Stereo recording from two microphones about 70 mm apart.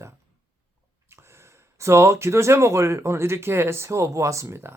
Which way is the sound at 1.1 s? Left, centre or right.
Right.